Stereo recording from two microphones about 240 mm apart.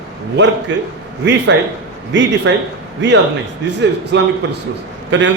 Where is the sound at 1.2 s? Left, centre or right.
Right.